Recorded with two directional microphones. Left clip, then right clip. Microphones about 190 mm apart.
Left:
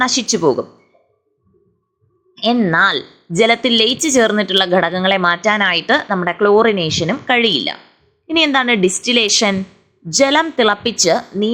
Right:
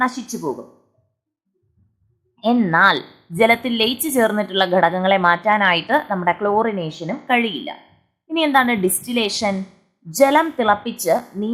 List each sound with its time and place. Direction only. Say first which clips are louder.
0.0 s a woman's voice: left 7 dB; 20° left (ahead or behind)
0.5 s speech: left 12 dB; centre (ahead or behind)
2.3 s a sound: left 3 dB; 15° left (ahead or behind)
2.6 s a woman's voice: right 1 dB; 15° left (ahead or behind)
9.7 s a sound: left 3 dB; 15° left (ahead or behind)
10.6 s a woman's voice: left 4 dB; 20° left (ahead or behind)